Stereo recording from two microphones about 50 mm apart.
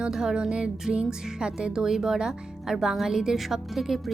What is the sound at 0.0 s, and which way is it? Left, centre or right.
Speech, centre.